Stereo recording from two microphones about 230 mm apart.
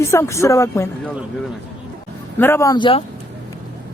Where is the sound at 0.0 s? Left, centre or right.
Centre.